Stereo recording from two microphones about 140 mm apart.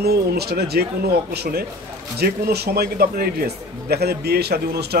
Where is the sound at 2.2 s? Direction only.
90° right.